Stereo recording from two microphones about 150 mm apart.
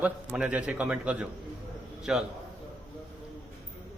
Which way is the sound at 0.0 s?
10° right (ahead or behind).